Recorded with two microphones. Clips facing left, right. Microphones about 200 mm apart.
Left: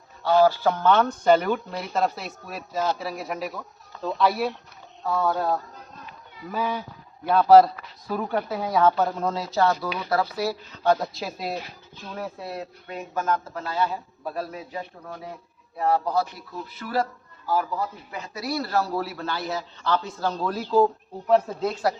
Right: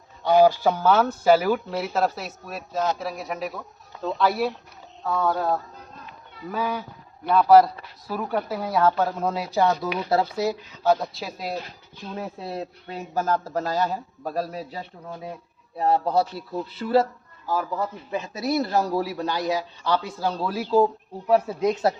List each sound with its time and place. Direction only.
0.2 s speech: 15° right (ahead or behind); by 6.8 s centre (ahead or behind)
8.0 s speech: 5° right (ahead or behind); by 10.6 s 20° right (ahead or behind)
10.7 s speech: centre (ahead or behind)
12.1 s speech: 25° right (ahead or behind)
18.1 s speech: 25° right (ahead or behind)